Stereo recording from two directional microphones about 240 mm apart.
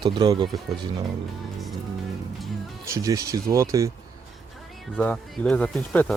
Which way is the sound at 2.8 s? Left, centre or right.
Centre.